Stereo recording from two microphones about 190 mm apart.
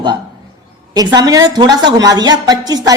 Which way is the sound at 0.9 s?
20° right (ahead or behind).